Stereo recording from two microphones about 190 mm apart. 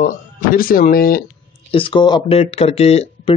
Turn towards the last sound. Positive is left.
turn(degrees=35)  # may be behind; listen again after turning